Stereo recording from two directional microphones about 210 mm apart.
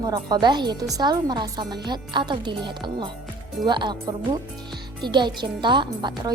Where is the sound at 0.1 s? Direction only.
20° right (ahead or behind).